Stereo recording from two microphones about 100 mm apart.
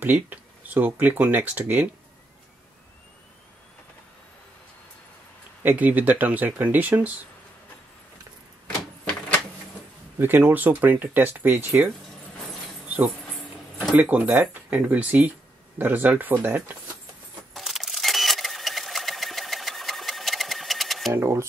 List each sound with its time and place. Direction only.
0.0 s speech: 20° right (ahead or behind)
5.6 s speech: 15° right (ahead or behind)
10.1 s speech: 20° right (ahead or behind)
13.9 s speech: 15° right (ahead or behind)
17.6 s sewing machine: centre (ahead or behind)
21.1 s speech: 25° right (ahead or behind)